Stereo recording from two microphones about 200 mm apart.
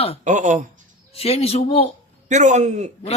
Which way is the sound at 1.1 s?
30° left (ahead or behind).